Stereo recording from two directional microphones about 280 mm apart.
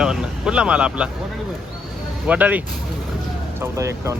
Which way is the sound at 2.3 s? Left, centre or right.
Centre.